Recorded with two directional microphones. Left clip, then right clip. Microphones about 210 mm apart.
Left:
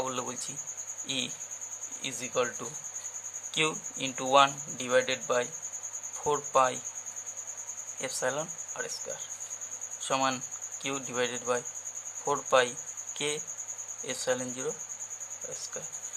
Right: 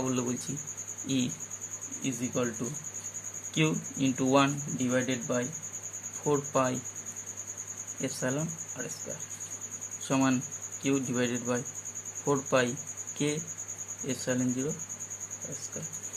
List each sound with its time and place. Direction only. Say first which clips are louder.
0.1 s speech: right 2 dB; 20° left (ahead or behind)
3.5 s speech: left 1 dB; 20° left (ahead or behind)
8.0 s speech: left 1 dB; 20° left (ahead or behind)
10.1 s speech: even; 20° left (ahead or behind)